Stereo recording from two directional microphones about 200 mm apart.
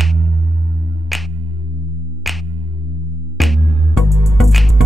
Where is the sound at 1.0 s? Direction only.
Centre (ahead or behind).